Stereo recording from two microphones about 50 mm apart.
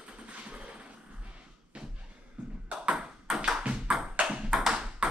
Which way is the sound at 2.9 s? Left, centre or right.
Centre.